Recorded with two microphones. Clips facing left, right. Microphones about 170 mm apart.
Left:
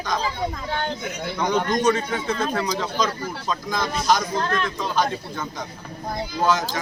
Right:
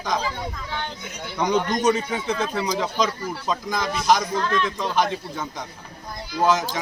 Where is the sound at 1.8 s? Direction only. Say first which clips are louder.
Even; 20° right (ahead or behind).